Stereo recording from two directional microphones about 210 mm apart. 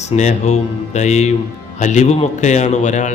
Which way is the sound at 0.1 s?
35° left (ahead or behind).